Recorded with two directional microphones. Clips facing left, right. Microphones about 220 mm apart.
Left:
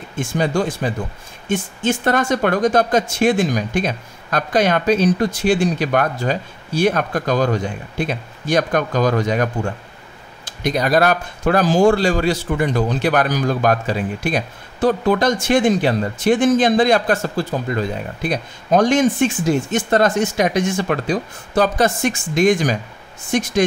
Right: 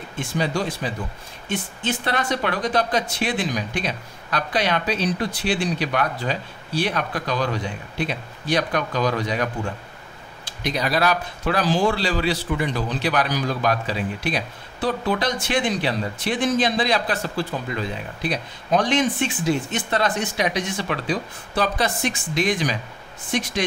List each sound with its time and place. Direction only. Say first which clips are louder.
0.1 s speech: left 5 dB; 50° left (ahead or behind)